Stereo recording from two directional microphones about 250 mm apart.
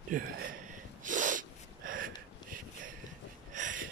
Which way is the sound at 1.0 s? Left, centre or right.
Right.